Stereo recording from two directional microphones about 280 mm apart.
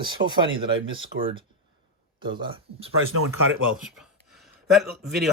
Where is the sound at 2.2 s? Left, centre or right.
Centre.